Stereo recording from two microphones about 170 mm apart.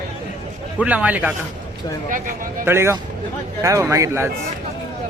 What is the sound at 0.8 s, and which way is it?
Speech, 10° right (ahead or behind).